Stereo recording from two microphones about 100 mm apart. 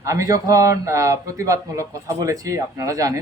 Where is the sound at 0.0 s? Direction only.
35° right (ahead or behind).